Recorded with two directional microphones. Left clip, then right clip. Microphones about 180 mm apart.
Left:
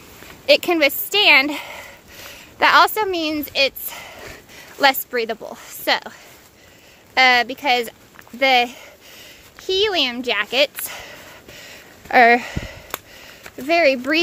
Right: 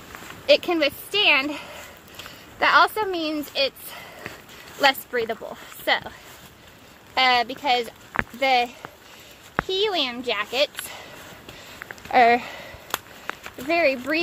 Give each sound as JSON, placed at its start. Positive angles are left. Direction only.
{"t": 0.5, "sound": "speech", "side_deg": 35}
{"t": 7.2, "sound": "speech", "side_deg": 35}
{"t": 12.1, "sound": "speech", "side_deg": 40}